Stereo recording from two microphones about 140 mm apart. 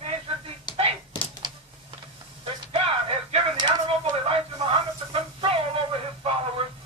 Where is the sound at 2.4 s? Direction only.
45° right (ahead or behind).